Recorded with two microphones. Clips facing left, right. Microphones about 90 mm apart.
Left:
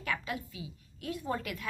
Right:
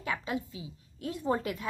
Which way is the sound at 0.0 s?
20° right (ahead or behind).